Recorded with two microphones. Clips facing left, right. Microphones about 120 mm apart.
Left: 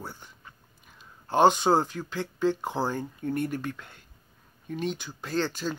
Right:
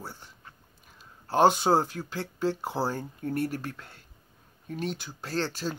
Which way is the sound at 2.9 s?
40° right (ahead or behind).